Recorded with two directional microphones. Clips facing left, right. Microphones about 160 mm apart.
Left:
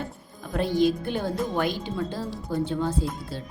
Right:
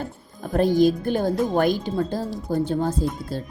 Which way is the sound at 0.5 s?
45° right (ahead or behind).